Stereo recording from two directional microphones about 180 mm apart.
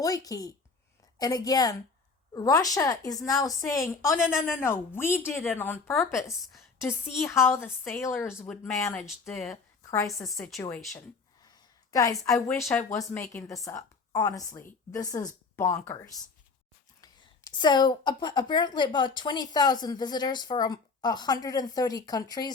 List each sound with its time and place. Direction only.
0.0 s a woman's voice: 20° left (ahead or behind)
8.1 s speech: centre (ahead or behind)
8.7 s a woman's voice: 15° left (ahead or behind)
9.3 s speech: centre (ahead or behind)
9.8 s a sound: 15° left (ahead or behind)
10.4 s speech: 5° left (ahead or behind)
11.4 s a sound: 20° left (ahead or behind)
12.5 s a woman's voice: 15° left (ahead or behind)
17.6 s a woman's voice: 25° left (ahead or behind)